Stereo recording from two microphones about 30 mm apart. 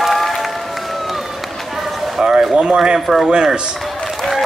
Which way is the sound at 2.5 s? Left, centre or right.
Right.